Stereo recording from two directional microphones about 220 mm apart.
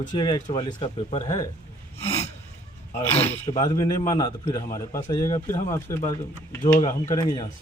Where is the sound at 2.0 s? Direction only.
30° left (ahead or behind).